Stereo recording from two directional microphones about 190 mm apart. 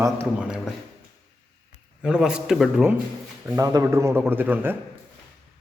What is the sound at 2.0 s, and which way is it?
Speech, 5° right (ahead or behind).